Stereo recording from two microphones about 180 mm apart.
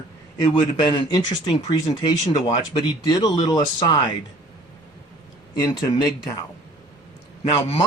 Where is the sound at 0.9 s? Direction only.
20° left (ahead or behind).